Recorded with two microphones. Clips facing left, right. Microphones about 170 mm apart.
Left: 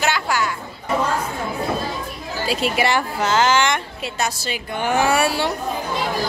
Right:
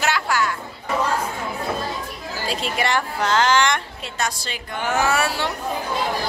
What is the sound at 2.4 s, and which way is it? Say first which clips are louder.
A woman's voice: left 4 dB; 5° left (ahead or behind).